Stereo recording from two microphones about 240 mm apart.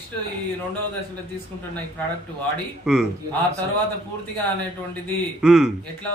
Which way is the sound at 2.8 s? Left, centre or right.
Centre.